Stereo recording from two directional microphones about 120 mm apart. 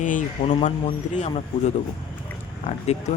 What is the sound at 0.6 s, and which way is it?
Speech, 70° left (ahead or behind).